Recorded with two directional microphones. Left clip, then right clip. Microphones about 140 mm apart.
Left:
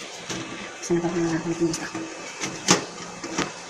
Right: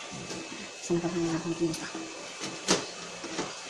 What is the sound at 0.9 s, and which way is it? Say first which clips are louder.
Speech: left 6 dB; 20° right (ahead or behind).